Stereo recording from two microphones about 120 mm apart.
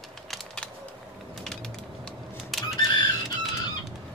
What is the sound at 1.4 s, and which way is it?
Typewriter, 5° left (ahead or behind).